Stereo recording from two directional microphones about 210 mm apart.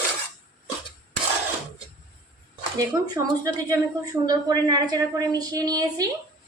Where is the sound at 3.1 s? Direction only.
15° right (ahead or behind).